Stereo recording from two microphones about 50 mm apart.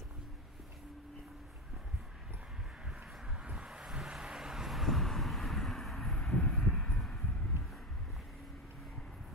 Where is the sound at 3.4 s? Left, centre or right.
Centre.